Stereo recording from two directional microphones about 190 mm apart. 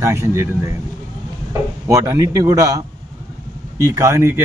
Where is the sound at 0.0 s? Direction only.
15° right (ahead or behind).